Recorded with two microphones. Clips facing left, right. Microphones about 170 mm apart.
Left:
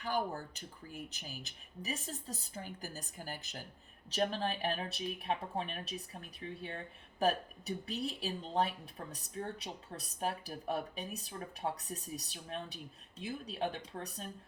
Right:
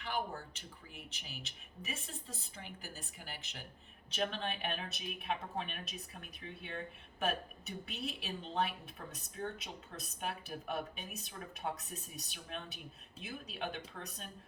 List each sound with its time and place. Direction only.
0.0 s a woman's voice: 40° left (ahead or behind)